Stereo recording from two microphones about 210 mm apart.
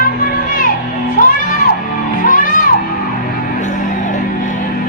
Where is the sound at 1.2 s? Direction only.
40° left (ahead or behind).